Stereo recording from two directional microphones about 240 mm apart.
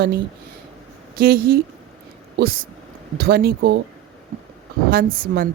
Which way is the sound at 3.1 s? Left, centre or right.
Right.